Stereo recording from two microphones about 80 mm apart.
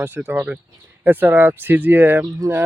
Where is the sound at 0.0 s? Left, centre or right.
Right.